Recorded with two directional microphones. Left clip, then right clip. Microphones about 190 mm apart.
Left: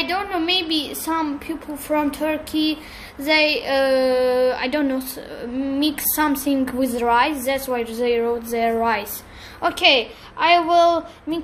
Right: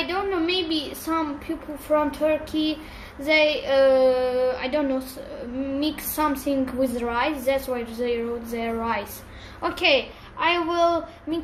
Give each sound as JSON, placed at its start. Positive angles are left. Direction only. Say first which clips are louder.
{"t": 0.0, "sound": "a sound", "louder": "left 2 dB", "side_deg": 45}
{"t": 1.9, "sound": "a woman's voice", "louder": "even", "side_deg": 45}
{"t": 9.6, "sound": "a woman's voice", "louder": "left 4 dB", "side_deg": 30}